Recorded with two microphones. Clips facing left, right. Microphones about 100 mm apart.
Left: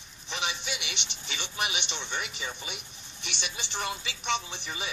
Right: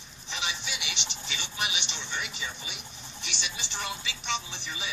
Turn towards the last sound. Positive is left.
turn(degrees=50)  # may be behind; listen again after turning